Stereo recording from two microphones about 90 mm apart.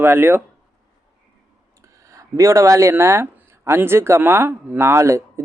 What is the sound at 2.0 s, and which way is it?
Speech, 35° right (ahead or behind).